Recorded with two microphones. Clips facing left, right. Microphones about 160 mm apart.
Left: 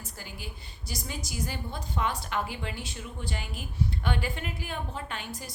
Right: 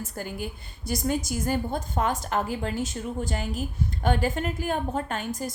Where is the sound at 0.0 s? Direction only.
50° right (ahead or behind).